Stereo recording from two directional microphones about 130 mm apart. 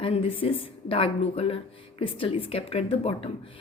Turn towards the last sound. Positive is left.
turn(degrees=50)  # may be behind; listen again after turning